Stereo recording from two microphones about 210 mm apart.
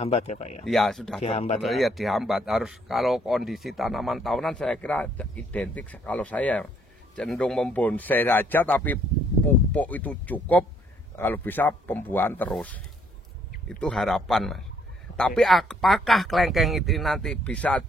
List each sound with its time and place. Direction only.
0.0 s speech: 30° left (ahead or behind)
0.7 s speech: centre (ahead or behind)
1.2 s speech: 30° left (ahead or behind)
1.6 s speech: centre (ahead or behind)